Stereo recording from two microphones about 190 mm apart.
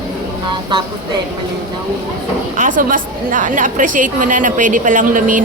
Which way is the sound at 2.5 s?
45° right (ahead or behind).